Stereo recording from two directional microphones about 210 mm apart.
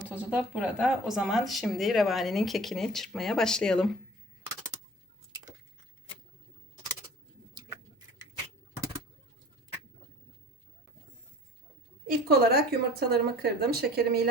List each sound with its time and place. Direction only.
0.2 s speech: 5° right (ahead or behind)
12.0 s speech: 50° right (ahead or behind)